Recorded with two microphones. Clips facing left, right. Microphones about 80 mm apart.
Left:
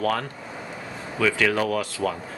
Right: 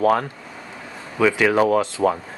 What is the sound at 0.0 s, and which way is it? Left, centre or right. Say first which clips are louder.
Speech: right 7 dB; right.